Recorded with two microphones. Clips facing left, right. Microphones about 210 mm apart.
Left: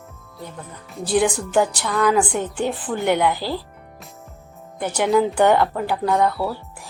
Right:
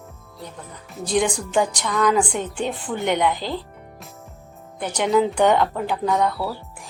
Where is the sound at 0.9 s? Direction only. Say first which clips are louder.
Left 2 dB; 5° left (ahead or behind).